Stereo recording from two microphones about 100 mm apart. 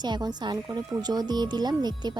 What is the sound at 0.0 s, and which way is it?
Speech, 45° right (ahead or behind).